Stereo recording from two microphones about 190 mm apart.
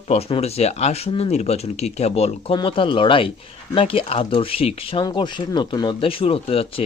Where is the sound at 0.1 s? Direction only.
30° left (ahead or behind).